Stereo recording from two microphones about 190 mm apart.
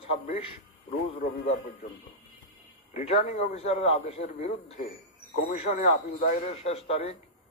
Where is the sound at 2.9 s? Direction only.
35° left (ahead or behind); by 6.5 s 50° left (ahead or behind).